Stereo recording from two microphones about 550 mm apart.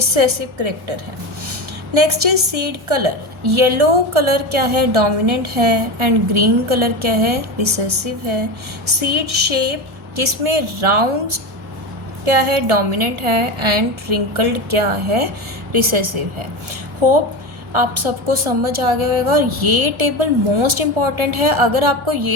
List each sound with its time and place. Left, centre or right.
0.1 s a woman's voice: right
1.5 s a sound: right
2.9 s a woman's voice: right
9.0 s a woman's voice: right
12.2 s a woman's voice: right
15.7 s a woman's voice: right
17.0 s a woman's voice: right
17.7 s a woman's voice: right